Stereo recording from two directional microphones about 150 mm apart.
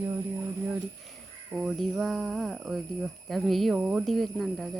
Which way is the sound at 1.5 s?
5° right (ahead or behind).